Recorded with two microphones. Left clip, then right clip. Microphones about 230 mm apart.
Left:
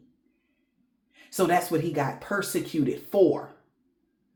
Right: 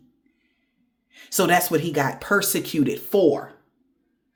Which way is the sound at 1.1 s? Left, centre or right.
Right.